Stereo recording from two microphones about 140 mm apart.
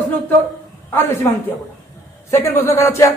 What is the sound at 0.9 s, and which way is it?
Speech, 15° left (ahead or behind).